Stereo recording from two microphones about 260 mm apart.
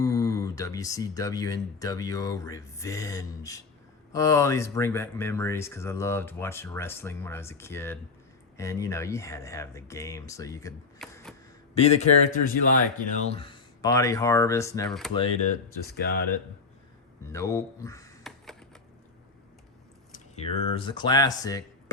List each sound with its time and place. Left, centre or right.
0.0 s speech: centre
11.0 s a sound: centre
11.7 s speech: left
15.9 s speech: left
17.2 s speech: centre
18.2 s computer keyboard: centre
20.1 s speech: left